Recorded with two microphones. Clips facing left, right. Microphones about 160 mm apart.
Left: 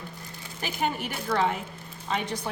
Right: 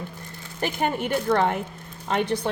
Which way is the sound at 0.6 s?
55° right (ahead or behind).